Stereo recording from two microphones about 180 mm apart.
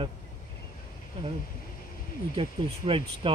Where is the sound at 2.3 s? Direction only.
30° right (ahead or behind).